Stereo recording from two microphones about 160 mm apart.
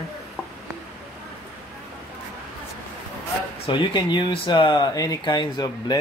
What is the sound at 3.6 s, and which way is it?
Speech, 30° left (ahead or behind).